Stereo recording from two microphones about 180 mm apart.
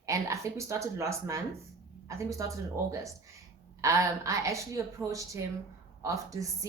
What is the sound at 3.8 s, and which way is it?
A woman's voice, 15° right (ahead or behind).